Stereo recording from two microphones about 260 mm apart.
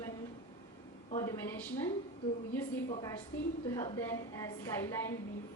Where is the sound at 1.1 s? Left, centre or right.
Centre.